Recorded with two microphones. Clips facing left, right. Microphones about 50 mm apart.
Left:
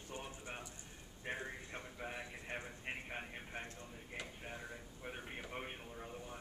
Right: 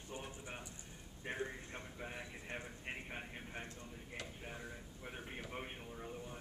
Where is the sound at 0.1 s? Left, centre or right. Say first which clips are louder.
Even; centre.